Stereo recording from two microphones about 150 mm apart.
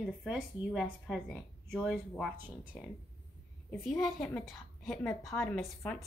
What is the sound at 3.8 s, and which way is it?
Speech, centre (ahead or behind).